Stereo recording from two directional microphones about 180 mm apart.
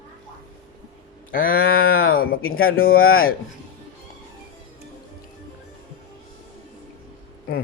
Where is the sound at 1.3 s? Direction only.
50° left (ahead or behind).